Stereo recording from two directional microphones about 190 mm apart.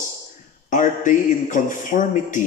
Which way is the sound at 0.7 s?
40° left (ahead or behind).